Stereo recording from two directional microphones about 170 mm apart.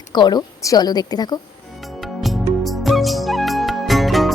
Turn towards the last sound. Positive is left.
turn(degrees=0)  # may be behind; listen again after turning